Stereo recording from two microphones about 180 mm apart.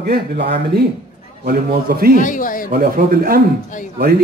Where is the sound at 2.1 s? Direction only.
45° left (ahead or behind).